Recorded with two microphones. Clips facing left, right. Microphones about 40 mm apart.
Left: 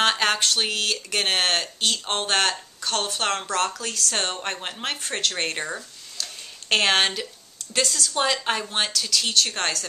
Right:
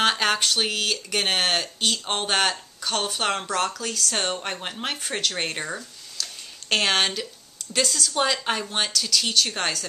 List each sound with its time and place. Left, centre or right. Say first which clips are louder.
0.0 s speech: even; centre